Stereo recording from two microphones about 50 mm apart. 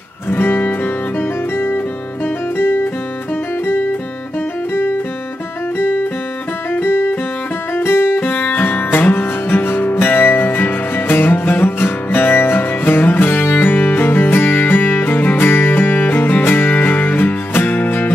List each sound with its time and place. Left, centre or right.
0.3 s music: left
2.5 s music: left
5.8 s music: left